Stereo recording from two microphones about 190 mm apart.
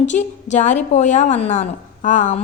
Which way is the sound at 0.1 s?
40° left (ahead or behind).